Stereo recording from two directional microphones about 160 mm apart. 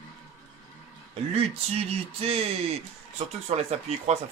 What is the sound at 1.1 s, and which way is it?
Speech, 40° right (ahead or behind).